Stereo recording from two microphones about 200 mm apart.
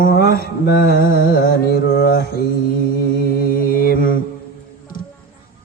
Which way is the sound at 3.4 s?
45° left (ahead or behind).